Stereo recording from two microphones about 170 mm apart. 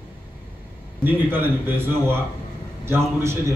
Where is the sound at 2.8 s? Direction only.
15° right (ahead or behind).